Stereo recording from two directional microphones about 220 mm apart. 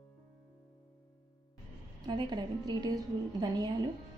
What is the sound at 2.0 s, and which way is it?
A woman's voice, 20° right (ahead or behind).